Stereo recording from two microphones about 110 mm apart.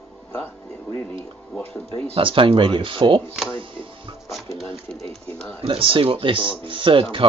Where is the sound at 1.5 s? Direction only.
10° left (ahead or behind).